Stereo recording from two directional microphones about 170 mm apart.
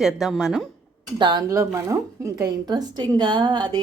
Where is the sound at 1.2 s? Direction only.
25° right (ahead or behind).